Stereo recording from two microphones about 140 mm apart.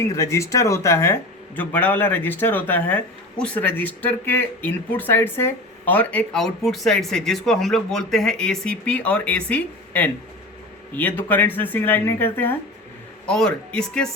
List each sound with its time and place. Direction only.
0.0 s a man's voice: 20° left (ahead or behind)
13.2 s speech: 5° left (ahead or behind)